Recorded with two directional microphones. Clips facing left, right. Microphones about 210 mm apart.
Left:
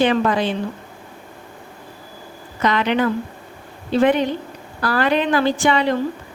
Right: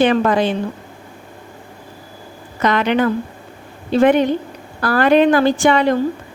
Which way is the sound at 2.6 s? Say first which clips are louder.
Right 3 dB; 50° right (ahead or behind).